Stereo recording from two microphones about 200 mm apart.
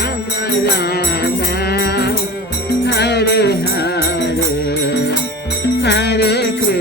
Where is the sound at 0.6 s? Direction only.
50° left (ahead or behind).